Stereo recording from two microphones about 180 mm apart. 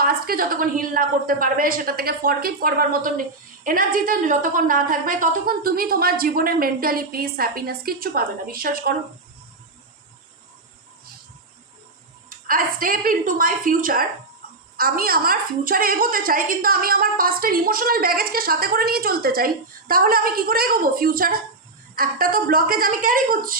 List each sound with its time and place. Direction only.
0.0 s a woman's voice: 55° right (ahead or behind)
12.3 s a woman's voice: 50° right (ahead or behind)